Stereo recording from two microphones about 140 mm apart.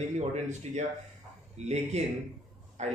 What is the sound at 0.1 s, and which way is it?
A man's voice, 55° right (ahead or behind).